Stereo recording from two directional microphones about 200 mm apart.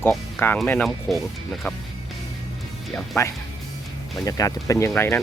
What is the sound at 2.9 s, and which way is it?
Speech, 10° left (ahead or behind).